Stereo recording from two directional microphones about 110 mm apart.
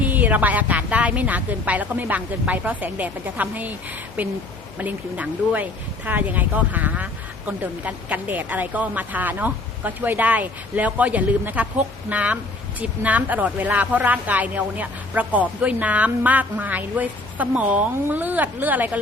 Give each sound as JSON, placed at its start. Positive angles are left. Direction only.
{"t": 0.0, "sound": "speech", "side_deg": -15}